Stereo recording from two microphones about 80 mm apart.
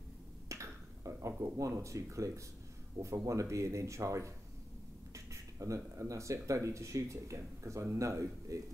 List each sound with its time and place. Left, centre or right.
0.5 s finger snapping: right
1.8 s speech: right